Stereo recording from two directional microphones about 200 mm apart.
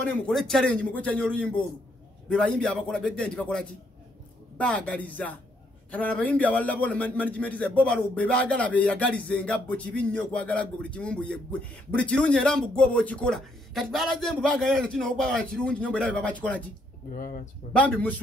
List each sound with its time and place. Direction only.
0.3 s a man's voice: centre (ahead or behind)
17.1 s speech: 40° left (ahead or behind)
17.7 s speech: 5° left (ahead or behind)